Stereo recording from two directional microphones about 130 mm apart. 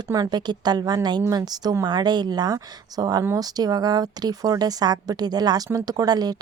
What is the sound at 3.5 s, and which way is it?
A woman's voice, 30° right (ahead or behind).